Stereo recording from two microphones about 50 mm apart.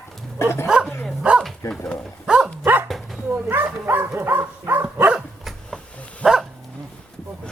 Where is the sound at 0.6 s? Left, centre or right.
Centre.